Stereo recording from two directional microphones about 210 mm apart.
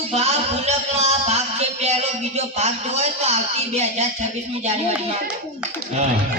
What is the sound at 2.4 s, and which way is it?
A man's voice, 30° right (ahead or behind).